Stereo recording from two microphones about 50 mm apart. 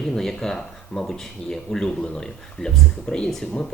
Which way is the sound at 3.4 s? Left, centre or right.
Left.